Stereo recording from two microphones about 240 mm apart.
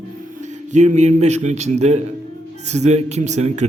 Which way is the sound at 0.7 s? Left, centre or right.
Right.